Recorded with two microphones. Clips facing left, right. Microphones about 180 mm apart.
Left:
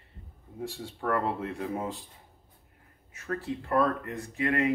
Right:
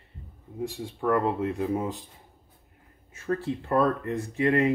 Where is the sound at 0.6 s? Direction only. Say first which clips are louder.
Right 5 dB; 15° right (ahead or behind).